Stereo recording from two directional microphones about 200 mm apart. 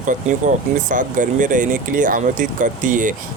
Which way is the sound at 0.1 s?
40° right (ahead or behind).